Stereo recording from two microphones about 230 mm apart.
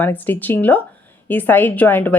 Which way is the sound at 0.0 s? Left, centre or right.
Centre.